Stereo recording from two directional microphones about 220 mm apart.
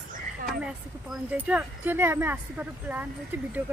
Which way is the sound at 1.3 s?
5° right (ahead or behind).